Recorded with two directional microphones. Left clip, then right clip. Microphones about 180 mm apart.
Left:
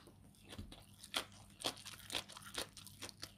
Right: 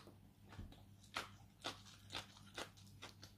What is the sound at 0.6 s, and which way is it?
Crumpling, 40° left (ahead or behind).